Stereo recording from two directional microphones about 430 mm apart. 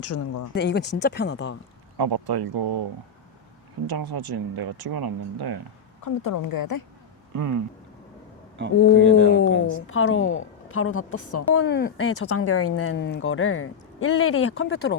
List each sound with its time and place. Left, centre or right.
0.0 s speech: left
0.5 s a woman's voice: left
2.0 s speech: right
3.8 s speech: right
6.0 s a woman's voice: left
7.3 s speech: right
9.4 s a woman's voice: left